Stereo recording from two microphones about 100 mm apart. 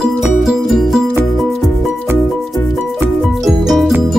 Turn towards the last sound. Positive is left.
turn(degrees=0)  # may be behind; listen again after turning